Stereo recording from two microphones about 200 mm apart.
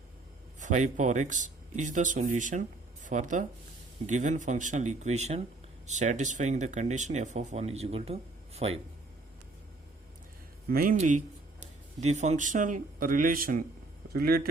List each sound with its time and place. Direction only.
0.6 s speech: 40° right (ahead or behind)
10.7 s speech: 45° right (ahead or behind)